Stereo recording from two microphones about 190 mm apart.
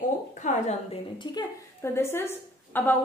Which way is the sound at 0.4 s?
40° left (ahead or behind).